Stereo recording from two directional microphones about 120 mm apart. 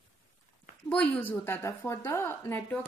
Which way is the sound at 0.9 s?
10° left (ahead or behind).